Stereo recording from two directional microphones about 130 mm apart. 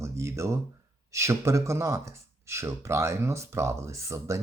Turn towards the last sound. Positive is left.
turn(degrees=-25)  # may be behind; listen again after turning